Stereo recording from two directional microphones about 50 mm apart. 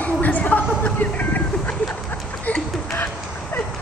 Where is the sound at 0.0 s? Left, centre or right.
Left.